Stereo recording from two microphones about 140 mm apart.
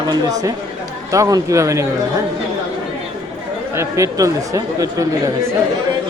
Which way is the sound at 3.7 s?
20° right (ahead or behind).